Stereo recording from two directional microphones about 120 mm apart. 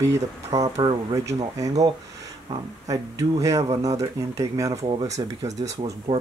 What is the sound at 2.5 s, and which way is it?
Speech, 30° right (ahead or behind).